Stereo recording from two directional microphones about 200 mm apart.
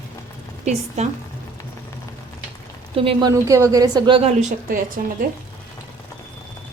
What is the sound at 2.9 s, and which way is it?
A woman's voice, 30° right (ahead or behind).